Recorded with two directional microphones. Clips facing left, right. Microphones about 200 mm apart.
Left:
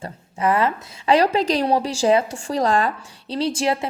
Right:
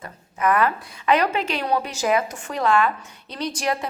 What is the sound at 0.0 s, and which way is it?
A woman's voice, 30° left (ahead or behind).